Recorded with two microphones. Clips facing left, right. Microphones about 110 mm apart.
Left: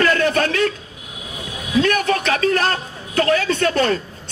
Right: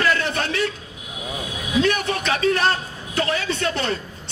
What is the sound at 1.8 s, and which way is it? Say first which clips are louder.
A man's voice: left 4 dB; 50° left (ahead or behind).